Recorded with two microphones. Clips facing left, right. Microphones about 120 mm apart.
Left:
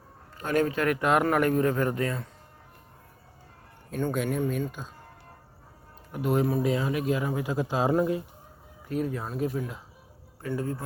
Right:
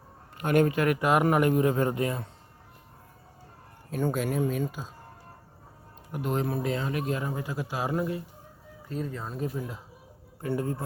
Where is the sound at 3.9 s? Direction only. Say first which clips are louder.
Even; 5° right (ahead or behind).